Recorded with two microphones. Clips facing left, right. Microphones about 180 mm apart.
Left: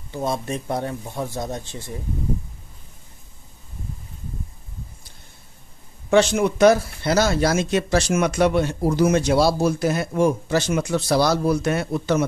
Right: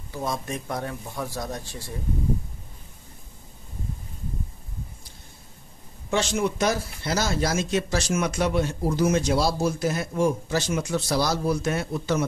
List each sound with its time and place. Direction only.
0.1 s speech: 25° left (ahead or behind)
6.0 s speech: 65° left (ahead or behind)